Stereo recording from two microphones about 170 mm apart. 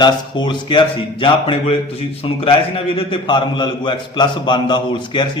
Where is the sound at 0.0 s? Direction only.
25° left (ahead or behind).